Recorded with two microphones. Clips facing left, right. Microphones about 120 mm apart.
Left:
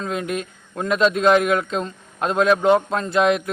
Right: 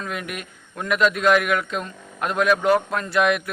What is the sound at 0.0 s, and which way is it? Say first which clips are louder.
Speech: left 6 dB; 25° left (ahead or behind).